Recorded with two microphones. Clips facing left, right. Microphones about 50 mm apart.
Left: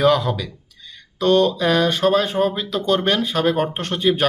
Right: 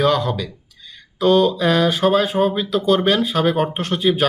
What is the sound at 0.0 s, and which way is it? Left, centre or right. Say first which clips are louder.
Speech: left 1 dB; centre.